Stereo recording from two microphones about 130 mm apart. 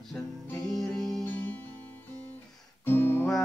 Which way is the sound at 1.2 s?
15° left (ahead or behind).